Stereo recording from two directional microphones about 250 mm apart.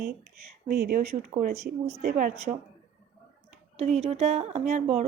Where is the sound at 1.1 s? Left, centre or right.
Right.